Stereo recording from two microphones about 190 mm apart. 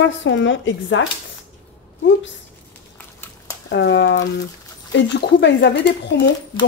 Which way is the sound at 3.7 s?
65° left (ahead or behind).